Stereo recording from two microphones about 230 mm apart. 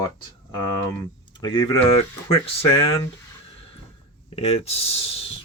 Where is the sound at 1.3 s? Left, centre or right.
Centre.